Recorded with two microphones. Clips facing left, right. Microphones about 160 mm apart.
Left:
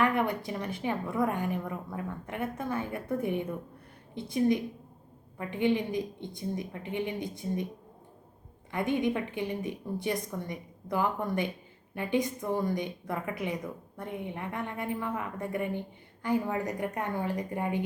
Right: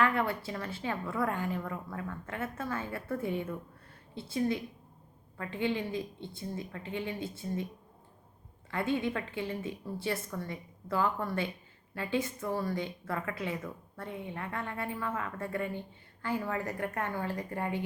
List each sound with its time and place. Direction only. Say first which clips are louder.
0.0 s speech: left 2 dB; 15° left (ahead or behind)
8.7 s speech: left 3 dB; 15° left (ahead or behind)